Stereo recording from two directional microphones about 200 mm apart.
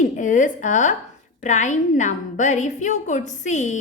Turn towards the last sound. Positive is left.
turn(degrees=35)  # may be behind; listen again after turning